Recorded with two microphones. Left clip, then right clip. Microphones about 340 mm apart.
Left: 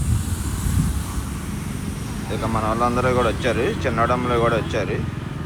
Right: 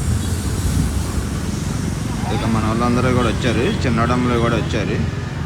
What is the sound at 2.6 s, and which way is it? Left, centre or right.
Vehicle, right.